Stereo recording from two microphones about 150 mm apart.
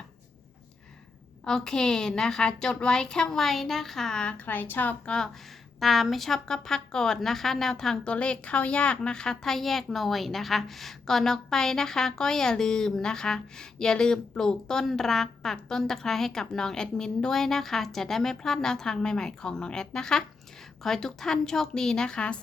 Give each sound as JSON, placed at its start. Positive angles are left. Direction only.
{"t": 1.5, "sound": "a woman's voice", "side_deg": 5}